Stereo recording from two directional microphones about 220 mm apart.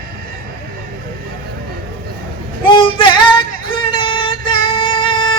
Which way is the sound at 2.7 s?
20° left (ahead or behind).